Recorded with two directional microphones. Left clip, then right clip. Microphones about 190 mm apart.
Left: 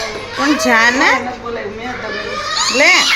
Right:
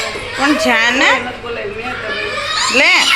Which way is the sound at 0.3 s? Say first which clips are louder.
Even; 20° left (ahead or behind).